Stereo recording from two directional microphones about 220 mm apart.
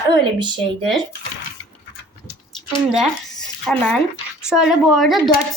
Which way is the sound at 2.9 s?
Centre (ahead or behind).